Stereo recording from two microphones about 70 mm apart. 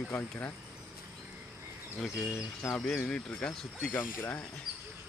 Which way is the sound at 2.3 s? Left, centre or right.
Left.